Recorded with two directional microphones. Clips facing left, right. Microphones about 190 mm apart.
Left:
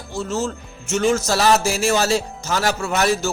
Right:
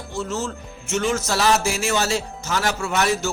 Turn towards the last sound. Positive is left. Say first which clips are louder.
# left 2 dB
turn(degrees=40)  # may be behind; listen again after turning